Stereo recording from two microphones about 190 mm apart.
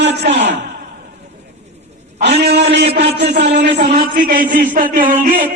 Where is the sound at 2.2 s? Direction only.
60° right (ahead or behind).